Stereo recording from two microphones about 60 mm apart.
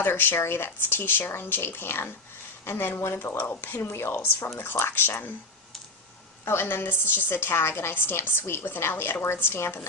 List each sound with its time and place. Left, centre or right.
0.0 s a woman's voice: left
6.4 s a woman's voice: left